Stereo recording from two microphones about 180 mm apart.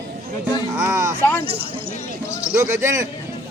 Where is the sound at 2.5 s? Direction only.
15° right (ahead or behind).